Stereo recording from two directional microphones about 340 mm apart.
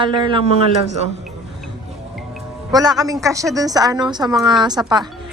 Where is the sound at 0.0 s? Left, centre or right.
Centre.